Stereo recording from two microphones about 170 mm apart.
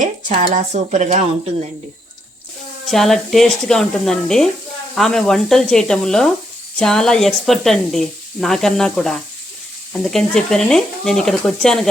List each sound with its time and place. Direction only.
0.0 s speech: 45° right (ahead or behind)
2.8 s speech: centre (ahead or behind)